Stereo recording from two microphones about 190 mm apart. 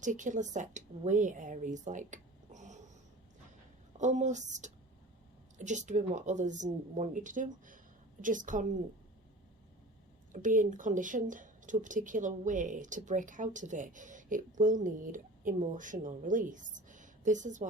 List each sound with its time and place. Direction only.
0.0 s speech: 40° right (ahead or behind)
3.9 s speech: 40° right (ahead or behind)
10.3 s speech: 45° right (ahead or behind)